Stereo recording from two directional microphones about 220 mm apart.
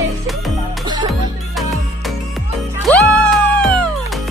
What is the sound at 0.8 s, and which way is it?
Music, 20° right (ahead or behind).